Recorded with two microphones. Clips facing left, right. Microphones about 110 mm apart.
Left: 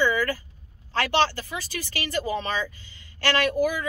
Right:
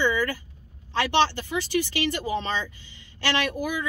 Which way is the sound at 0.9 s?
20° right (ahead or behind).